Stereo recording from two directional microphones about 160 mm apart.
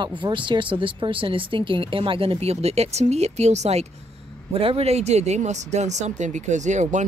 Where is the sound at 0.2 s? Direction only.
30° right (ahead or behind).